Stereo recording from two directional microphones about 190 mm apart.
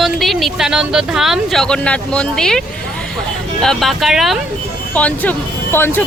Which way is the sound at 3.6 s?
Centre (ahead or behind).